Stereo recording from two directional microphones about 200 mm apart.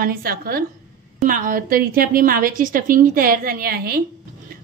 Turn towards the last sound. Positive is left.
turn(degrees=-50)  # may be behind; listen again after turning